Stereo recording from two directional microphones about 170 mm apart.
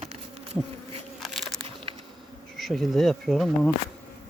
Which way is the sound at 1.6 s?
35° right (ahead or behind).